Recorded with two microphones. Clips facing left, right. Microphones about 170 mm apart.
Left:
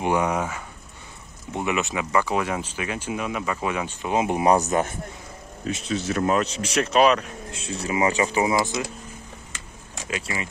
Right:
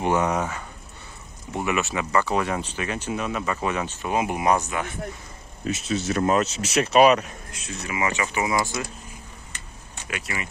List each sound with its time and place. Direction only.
0.0 s speech: 10° left (ahead or behind); by 4.9 s 40° left (ahead or behind)
5.7 s speech: 5° right (ahead or behind)
7.5 s speech: 30° left (ahead or behind)
8.8 s speech: 20° left (ahead or behind)
9.5 s vehicle: 90° left
10.0 s speech: 30° left (ahead or behind)